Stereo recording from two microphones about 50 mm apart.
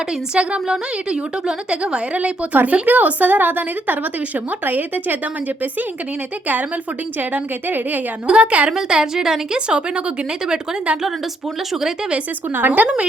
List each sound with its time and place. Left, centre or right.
0.3 s a woman's voice: centre; by 5.1 s right
7.2 s a woman's voice: right
8.3 s a woman's voice: right
8.7 s a woman's voice: centre
11.7 s a woman's voice: centre
12.5 s a woman's voice: right